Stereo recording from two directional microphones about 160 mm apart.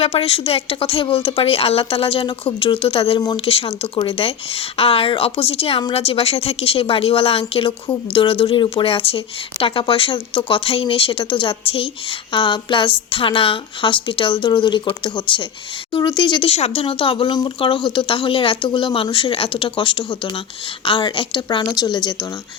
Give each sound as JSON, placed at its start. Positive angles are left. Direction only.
{"t": 0.0, "sound": "a woman's voice", "side_deg": 40}